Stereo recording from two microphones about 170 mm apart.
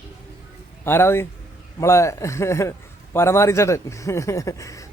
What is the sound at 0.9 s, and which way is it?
A man's voice, 15° left (ahead or behind).